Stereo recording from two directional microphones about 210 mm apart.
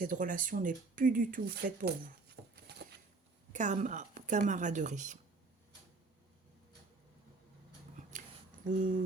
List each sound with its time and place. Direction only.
0.0 s speech: 40° right (ahead or behind)
3.5 s a woman's voice: 35° right (ahead or behind)
8.6 s a woman's voice: 40° right (ahead or behind)